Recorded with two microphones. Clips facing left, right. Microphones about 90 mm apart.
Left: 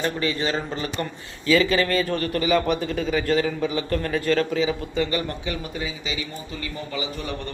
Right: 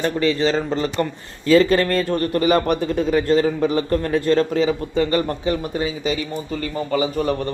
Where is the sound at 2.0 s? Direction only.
35° right (ahead or behind).